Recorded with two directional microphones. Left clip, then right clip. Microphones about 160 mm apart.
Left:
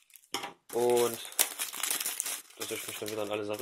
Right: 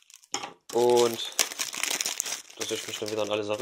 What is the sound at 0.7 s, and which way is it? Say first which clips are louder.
Crumpling: right 5 dB; 40° right (ahead or behind).